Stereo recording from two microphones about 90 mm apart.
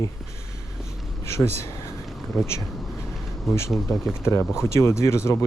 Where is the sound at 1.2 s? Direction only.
30° left (ahead or behind).